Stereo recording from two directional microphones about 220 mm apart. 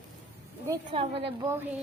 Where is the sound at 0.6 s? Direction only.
15° right (ahead or behind).